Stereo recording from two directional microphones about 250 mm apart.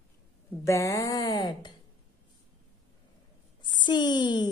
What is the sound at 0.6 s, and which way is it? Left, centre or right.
Speech, centre.